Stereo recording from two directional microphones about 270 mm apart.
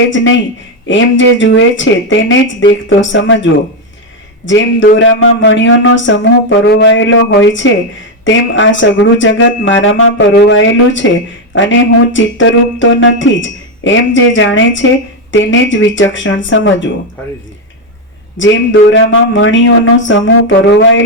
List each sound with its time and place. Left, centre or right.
0.1 s speech: left
4.4 s speech: left
18.3 s speech: left